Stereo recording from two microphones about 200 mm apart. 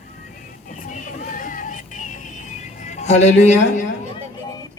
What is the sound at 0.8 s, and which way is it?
Music, 40° left (ahead or behind).